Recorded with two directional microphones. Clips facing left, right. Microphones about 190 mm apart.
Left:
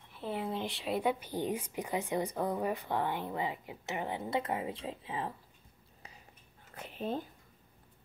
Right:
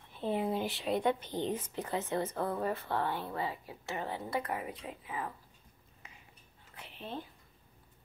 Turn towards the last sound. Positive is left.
turn(degrees=45)  # may be behind; listen again after turning